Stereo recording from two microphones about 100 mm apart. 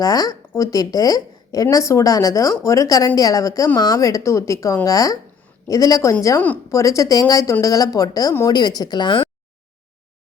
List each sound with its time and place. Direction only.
0.0 s a woman's voice: 40° left (ahead or behind)